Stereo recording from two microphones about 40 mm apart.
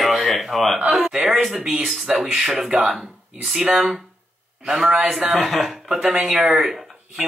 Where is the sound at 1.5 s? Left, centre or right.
Centre.